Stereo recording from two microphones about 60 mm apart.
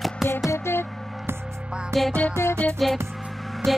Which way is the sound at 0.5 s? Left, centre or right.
Left.